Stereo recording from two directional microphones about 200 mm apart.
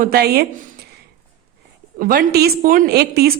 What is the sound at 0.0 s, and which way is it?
Speech, 50° right (ahead or behind).